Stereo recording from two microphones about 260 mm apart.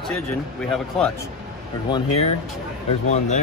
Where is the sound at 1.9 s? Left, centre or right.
Left.